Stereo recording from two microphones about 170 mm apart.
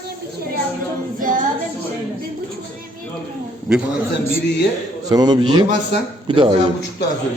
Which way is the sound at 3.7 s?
5° right (ahead or behind).